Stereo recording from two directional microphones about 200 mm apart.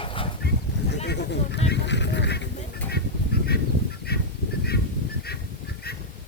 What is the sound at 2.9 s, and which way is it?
Goose, 55° left (ahead or behind).